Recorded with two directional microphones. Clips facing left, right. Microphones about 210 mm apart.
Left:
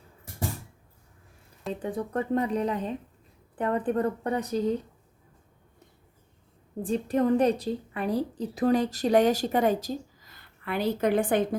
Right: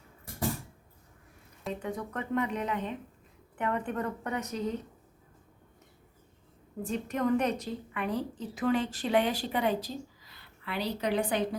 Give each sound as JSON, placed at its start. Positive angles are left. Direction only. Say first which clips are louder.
{"t": 1.8, "sound": "a woman's voice", "louder": "left 9 dB", "side_deg": 30}
{"t": 6.8, "sound": "a woman's voice", "louder": "left 5 dB", "side_deg": 30}